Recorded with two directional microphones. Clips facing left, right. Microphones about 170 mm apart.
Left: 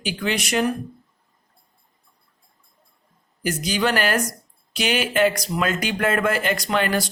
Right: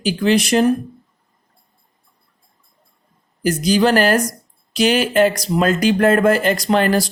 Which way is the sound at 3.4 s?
40° right (ahead or behind).